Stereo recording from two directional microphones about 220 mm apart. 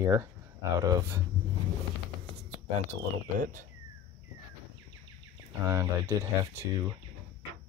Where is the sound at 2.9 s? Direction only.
35° right (ahead or behind).